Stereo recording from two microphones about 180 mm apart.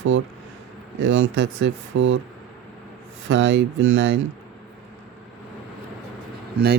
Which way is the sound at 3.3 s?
80° right.